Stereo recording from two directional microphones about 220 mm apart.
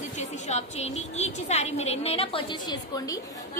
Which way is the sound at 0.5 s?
30° left (ahead or behind).